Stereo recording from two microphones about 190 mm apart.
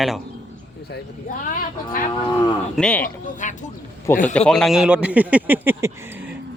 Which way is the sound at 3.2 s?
40° left (ahead or behind).